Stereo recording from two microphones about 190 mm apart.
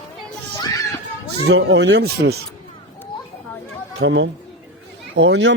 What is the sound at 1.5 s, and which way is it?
Speech, 65° right (ahead or behind).